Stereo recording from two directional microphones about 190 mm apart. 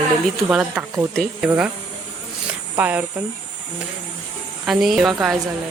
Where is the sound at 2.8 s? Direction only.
10° right (ahead or behind).